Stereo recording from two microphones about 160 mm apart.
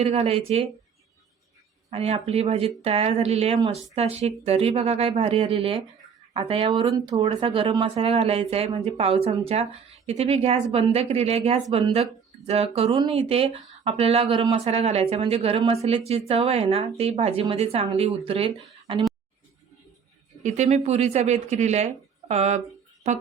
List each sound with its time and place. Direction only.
0.0 s speech: 40° right (ahead or behind)
1.9 s speech: 40° right (ahead or behind)
20.4 s speech: 45° right (ahead or behind)